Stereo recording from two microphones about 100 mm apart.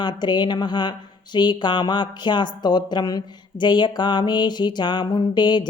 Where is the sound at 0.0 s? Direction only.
50° left (ahead or behind).